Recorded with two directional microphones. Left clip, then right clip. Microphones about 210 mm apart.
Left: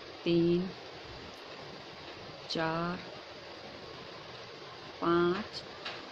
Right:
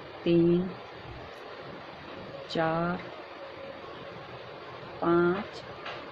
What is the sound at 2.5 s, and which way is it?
Speech, 10° left (ahead or behind).